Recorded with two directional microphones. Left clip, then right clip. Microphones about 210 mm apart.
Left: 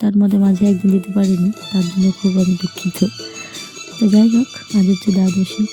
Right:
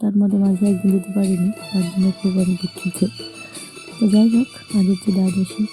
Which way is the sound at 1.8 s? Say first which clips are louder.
Left 3 dB; 20° left (ahead or behind).